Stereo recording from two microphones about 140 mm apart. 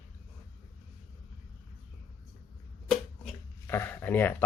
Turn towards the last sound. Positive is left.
turn(degrees=15)  # may be behind; listen again after turning